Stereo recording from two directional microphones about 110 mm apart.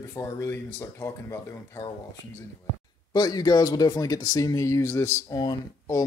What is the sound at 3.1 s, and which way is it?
Speech, 40° left (ahead or behind).